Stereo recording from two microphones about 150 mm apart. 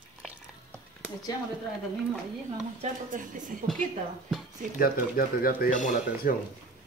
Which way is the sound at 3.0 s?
60° right (ahead or behind).